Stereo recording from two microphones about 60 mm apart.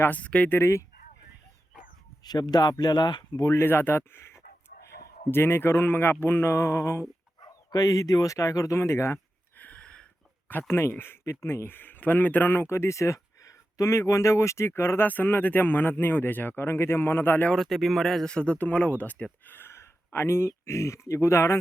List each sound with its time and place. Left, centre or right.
0.0 s speech: left
0.6 s speech: left
2.3 s speech: left
3.3 s speech: left
3.6 s a man's voice: left
7.7 s speech: left
8.8 s speech: left
9.6 s a sound: left
10.5 s a man's voice: left
15.0 s a man's voice: left
17.5 s speech: centre
18.3 s speech: left
19.5 s speech: left